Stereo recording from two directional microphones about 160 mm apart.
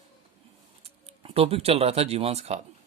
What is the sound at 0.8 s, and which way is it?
Speech, 35° right (ahead or behind).